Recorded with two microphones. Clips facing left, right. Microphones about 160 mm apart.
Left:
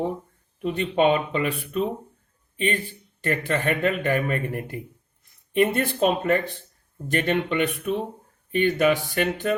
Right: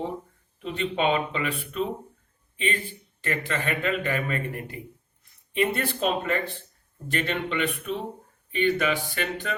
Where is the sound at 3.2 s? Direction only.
45° left (ahead or behind).